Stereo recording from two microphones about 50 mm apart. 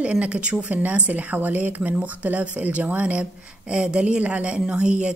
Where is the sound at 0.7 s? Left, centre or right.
Right.